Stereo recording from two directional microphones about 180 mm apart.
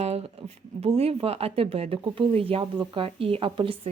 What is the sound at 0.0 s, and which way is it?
Speech, 35° right (ahead or behind).